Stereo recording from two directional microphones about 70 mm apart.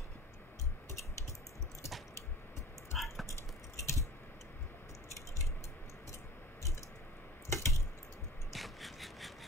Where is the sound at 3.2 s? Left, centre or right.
Left.